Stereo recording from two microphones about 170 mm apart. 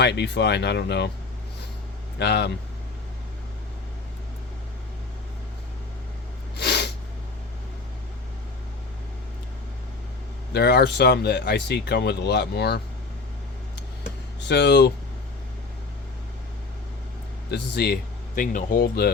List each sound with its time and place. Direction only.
0.0 s speech: 85° left
2.1 s speech: 85° left
6.6 s snort: 80° left
10.5 s speech: 75° left (ahead or behind)
14.4 s speech: 90° left
17.5 s speech: 75° left (ahead or behind)